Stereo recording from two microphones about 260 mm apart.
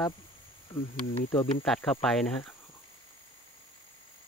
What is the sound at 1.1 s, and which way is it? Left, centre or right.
Speech, left.